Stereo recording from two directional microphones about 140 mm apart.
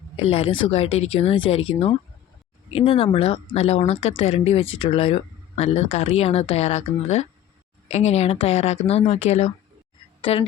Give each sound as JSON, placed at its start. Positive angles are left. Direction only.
{"t": 0.2, "sound": "speech", "side_deg": 45}
{"t": 10.2, "sound": "speech", "side_deg": 40}